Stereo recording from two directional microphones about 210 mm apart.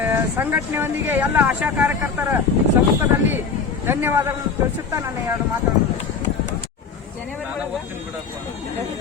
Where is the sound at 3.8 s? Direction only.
10° right (ahead or behind).